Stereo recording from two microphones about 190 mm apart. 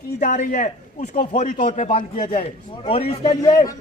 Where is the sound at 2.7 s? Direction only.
30° left (ahead or behind).